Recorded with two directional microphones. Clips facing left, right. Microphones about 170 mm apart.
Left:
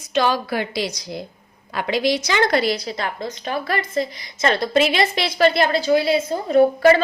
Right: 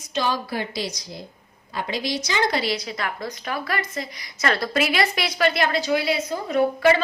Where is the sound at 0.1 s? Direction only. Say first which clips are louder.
Left 5 dB; 75° left (ahead or behind); by 2.7 s 55° left (ahead or behind).